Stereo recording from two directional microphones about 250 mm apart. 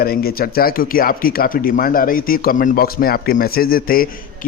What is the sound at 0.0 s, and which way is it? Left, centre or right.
Speech, left.